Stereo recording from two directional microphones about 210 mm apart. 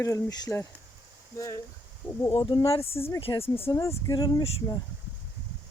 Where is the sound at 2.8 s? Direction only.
10° left (ahead or behind).